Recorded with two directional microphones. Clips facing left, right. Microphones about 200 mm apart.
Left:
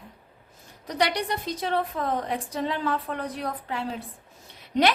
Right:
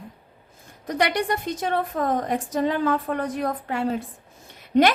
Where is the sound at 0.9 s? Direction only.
55° right (ahead or behind).